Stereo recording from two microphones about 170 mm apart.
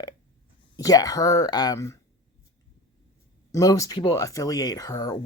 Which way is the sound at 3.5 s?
20° left (ahead or behind).